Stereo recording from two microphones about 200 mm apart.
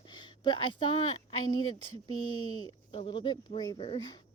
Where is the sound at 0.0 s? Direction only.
20° left (ahead or behind).